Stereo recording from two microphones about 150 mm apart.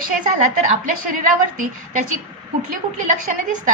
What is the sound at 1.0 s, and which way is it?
Speech, 65° right (ahead or behind).